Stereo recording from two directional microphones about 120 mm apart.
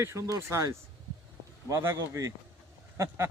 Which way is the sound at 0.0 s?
20° right (ahead or behind).